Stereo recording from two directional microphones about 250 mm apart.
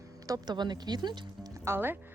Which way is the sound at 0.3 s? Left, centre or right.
Centre.